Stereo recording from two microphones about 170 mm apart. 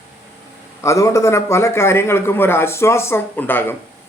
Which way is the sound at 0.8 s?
15° left (ahead or behind).